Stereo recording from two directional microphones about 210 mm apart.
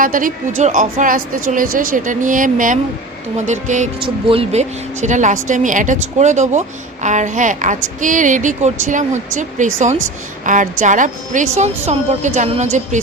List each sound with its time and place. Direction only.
0.0 s a woman's voice: 40° right (ahead or behind)